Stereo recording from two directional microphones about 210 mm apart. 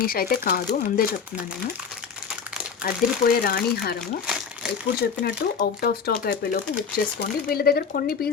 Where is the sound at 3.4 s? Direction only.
50° left (ahead or behind).